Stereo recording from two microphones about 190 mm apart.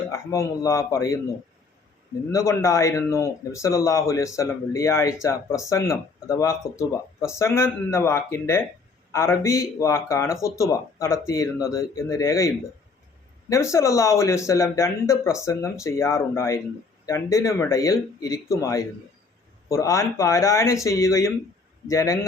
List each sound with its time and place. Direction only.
0.1 s speech: 15° left (ahead or behind)
2.3 s speech: 15° left (ahead or behind)